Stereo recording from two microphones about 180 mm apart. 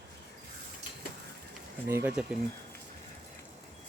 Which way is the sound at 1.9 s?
15° right (ahead or behind).